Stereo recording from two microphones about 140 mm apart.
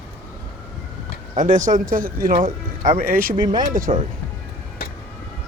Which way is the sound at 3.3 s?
30° right (ahead or behind).